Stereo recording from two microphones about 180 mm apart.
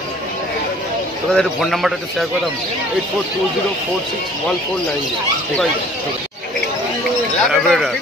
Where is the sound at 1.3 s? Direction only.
Centre (ahead or behind).